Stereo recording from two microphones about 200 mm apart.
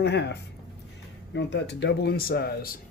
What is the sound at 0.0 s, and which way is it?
Speech, 55° left (ahead or behind).